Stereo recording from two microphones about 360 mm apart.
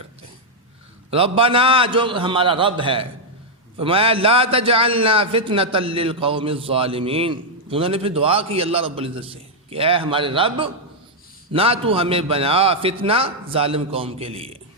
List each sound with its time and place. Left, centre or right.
1.1 s a man's voice: centre